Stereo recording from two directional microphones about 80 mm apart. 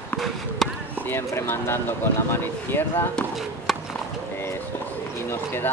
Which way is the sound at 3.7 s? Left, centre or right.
Centre.